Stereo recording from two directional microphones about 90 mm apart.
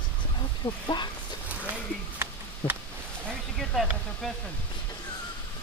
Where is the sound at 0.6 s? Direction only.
70° left (ahead or behind).